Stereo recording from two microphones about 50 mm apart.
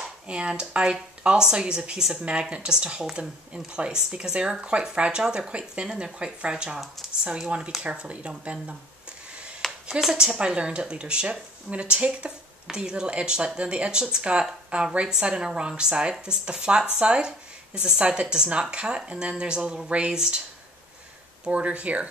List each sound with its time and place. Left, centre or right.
0.3 s a woman's voice: centre
9.6 s a sound: centre
10.1 s a woman's voice: centre
21.5 s speech: right